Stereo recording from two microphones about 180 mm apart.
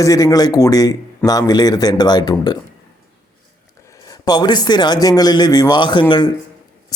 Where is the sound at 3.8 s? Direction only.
20° left (ahead or behind).